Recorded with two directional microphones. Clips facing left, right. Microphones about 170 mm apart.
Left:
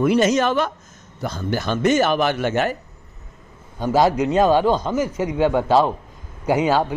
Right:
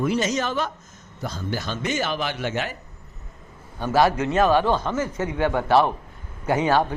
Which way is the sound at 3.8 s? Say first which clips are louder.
Left 3 dB; 15° left (ahead or behind).